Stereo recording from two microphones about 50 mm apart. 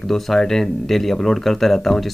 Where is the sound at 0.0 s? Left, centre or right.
Centre.